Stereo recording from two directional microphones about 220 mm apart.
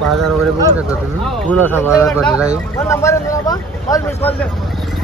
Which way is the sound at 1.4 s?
10° left (ahead or behind).